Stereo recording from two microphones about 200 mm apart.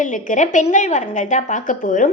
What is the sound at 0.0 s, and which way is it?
A woman's voice, 40° left (ahead or behind).